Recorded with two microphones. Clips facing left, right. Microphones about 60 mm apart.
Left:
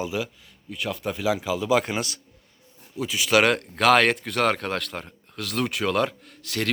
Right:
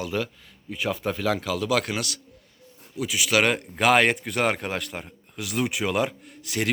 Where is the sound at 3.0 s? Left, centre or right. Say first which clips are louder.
Left 2 dB; centre.